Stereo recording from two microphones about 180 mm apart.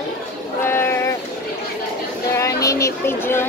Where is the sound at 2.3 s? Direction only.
15° left (ahead or behind).